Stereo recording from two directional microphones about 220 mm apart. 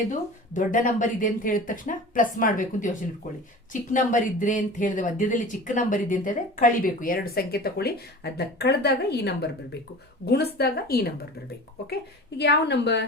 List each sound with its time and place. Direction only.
0.1 s a woman's voice: 35° left (ahead or behind)
12.4 s a woman's voice: 50° left (ahead or behind)